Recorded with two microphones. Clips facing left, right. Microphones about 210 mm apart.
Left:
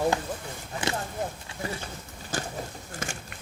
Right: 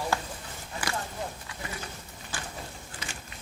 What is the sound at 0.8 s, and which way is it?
Speech, 25° left (ahead or behind).